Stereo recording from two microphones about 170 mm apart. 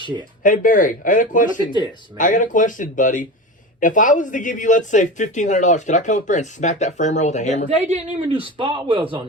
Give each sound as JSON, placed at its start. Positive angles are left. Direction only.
{"t": 0.4, "sound": "speech", "side_deg": 50}
{"t": 7.7, "sound": "speech", "side_deg": -40}
{"t": 8.3, "sound": "speech", "side_deg": -30}